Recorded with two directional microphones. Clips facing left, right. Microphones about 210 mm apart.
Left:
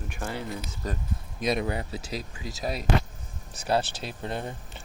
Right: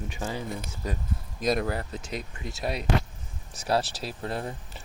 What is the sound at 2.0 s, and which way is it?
Speech, 35° left (ahead or behind).